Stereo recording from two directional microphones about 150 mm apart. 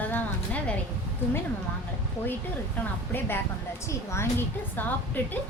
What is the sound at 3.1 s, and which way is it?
A woman's voice, 15° left (ahead or behind).